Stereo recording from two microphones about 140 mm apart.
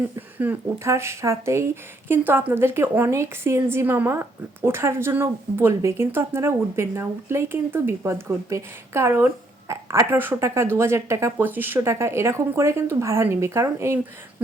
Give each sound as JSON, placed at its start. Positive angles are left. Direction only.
{"t": 0.3, "sound": "speech", "side_deg": -15}